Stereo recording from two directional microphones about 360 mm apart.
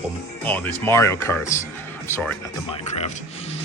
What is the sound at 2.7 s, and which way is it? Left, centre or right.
Speech, centre.